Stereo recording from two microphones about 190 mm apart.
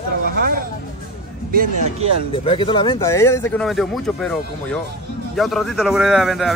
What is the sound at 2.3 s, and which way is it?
Speech, 30° left (ahead or behind).